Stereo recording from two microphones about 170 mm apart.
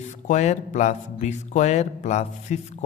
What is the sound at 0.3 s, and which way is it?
Speech, 45° left (ahead or behind).